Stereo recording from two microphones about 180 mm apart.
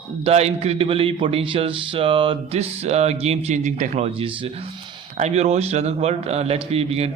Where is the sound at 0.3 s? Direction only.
35° right (ahead or behind).